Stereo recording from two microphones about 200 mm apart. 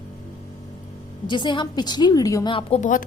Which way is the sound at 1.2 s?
25° left (ahead or behind).